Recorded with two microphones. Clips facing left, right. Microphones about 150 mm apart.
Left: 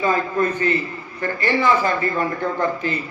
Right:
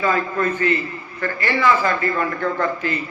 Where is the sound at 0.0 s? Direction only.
25° left (ahead or behind).